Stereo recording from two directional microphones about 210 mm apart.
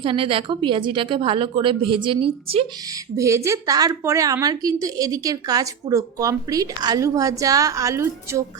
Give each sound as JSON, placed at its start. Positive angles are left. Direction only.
{"t": 0.0, "sound": "a woman's voice", "side_deg": -25}
{"t": 3.2, "sound": "a woman's voice", "side_deg": -15}